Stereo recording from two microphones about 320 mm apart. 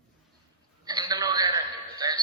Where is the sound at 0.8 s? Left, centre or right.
Centre.